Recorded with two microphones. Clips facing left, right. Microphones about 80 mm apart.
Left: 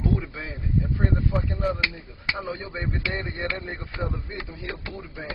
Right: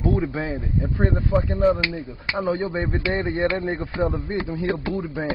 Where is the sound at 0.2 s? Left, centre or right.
Right.